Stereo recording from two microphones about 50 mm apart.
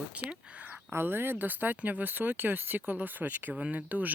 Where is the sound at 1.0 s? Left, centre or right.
Right.